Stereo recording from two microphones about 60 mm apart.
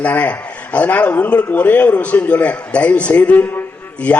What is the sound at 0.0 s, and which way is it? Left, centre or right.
A man's voice, left.